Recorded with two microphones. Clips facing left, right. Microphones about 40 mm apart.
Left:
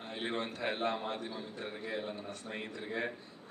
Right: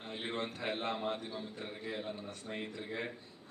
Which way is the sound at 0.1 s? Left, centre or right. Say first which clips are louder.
Left 2 dB; centre.